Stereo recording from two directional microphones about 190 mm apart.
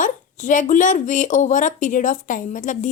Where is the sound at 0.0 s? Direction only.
40° left (ahead or behind).